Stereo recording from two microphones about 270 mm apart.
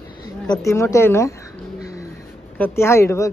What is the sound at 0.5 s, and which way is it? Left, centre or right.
Speech, centre.